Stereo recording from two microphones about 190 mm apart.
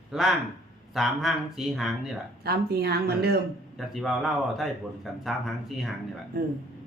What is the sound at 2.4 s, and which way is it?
Speech, 55° right (ahead or behind).